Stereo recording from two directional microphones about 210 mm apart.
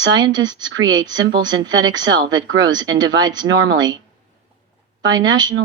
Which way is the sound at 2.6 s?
20° right (ahead or behind).